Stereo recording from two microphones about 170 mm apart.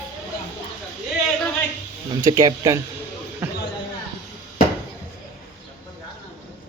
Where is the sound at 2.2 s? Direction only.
20° right (ahead or behind).